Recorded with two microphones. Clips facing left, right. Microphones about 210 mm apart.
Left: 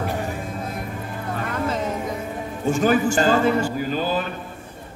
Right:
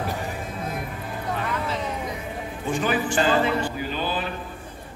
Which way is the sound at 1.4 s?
45° left (ahead or behind).